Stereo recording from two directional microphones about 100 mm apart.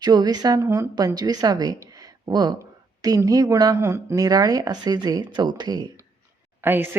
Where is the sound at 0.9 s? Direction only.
40° right (ahead or behind).